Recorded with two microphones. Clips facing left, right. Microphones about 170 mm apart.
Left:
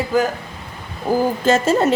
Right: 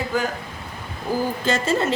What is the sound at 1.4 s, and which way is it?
Speech, 45° left (ahead or behind).